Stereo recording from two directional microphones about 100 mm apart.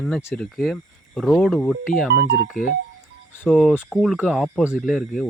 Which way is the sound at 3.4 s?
Centre (ahead or behind).